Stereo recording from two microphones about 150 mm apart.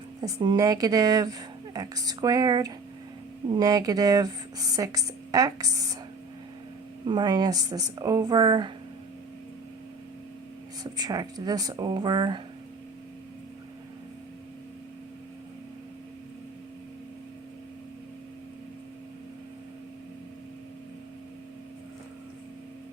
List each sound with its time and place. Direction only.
0.3 s speech: 25° right (ahead or behind)
7.0 s speech: 30° right (ahead or behind)
10.9 s speech: 25° right (ahead or behind)